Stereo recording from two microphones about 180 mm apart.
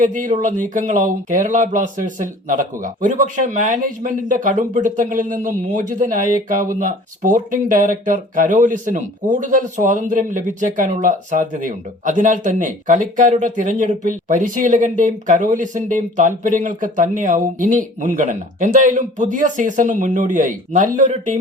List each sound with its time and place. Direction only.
0.0 s speech: 45° right (ahead or behind)